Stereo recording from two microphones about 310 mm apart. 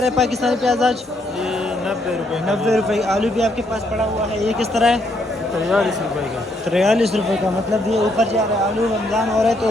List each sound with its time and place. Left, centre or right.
0.0 s a man's voice: centre
2.5 s a man's voice: centre
4.7 s a man's voice: centre
9.1 s a man's voice: centre